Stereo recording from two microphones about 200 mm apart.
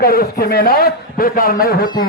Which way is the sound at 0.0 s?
50° left (ahead or behind).